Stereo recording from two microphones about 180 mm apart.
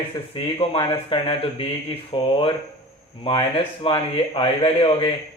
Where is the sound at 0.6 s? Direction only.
30° left (ahead or behind).